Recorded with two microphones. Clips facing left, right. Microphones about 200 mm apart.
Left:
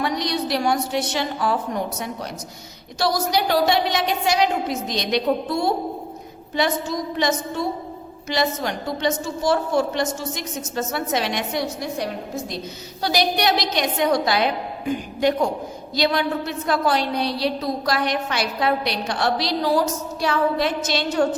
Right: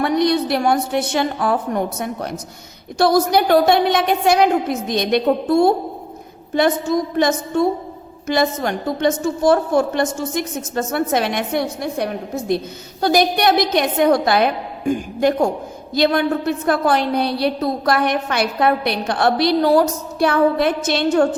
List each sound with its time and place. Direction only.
0.0 s a woman's voice: 55° right (ahead or behind)